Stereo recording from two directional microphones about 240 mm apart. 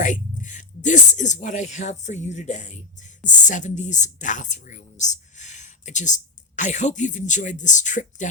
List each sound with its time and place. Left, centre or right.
0.0 s speech: left